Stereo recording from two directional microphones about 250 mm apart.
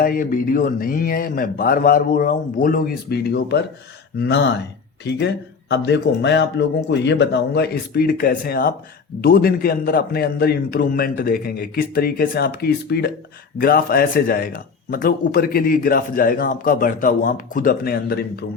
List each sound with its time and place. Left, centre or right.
0.0 s speech: left